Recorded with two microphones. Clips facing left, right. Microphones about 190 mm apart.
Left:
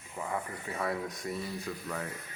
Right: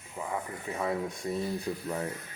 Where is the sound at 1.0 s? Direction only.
25° right (ahead or behind).